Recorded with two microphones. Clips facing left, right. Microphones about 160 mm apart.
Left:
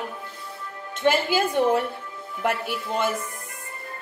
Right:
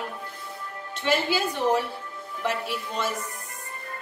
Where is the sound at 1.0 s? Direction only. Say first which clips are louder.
Left 4 dB; 55° left (ahead or behind).